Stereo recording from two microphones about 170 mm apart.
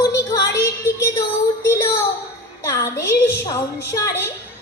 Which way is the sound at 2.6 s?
15° left (ahead or behind).